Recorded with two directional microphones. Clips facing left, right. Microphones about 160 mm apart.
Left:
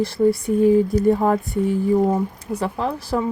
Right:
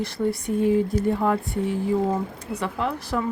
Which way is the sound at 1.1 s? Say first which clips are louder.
Left 4 dB; 40° left (ahead or behind).